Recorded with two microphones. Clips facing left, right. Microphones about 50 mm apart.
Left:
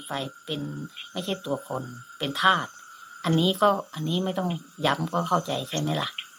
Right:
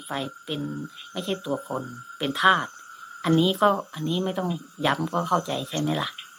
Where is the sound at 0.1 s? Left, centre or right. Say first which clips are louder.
Right 1 dB; centre.